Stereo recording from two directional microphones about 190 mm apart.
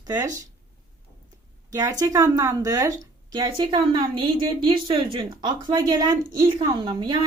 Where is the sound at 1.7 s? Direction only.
20° right (ahead or behind).